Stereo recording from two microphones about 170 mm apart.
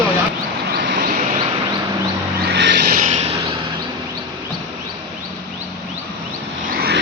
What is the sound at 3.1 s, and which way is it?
Vehicle, 40° right (ahead or behind).